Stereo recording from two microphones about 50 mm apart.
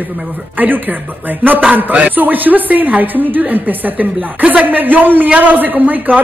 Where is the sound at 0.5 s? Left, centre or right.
Right.